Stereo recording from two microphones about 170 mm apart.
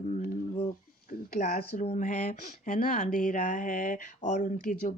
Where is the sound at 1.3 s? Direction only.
60° left (ahead or behind).